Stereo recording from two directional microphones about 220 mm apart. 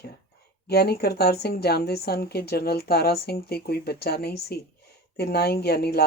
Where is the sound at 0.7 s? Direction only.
45° left (ahead or behind).